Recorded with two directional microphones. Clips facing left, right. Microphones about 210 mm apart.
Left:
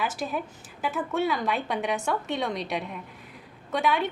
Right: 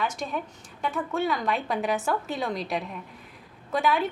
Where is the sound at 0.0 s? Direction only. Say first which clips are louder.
Even; 5° left (ahead or behind).